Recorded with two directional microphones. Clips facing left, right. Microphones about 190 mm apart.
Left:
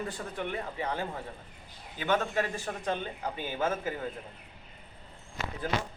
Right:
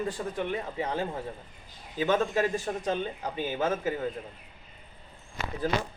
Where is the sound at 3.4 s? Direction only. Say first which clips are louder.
Right 3 dB; 25° right (ahead or behind).